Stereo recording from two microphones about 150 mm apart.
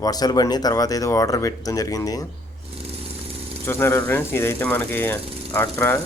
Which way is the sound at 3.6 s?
15° left (ahead or behind).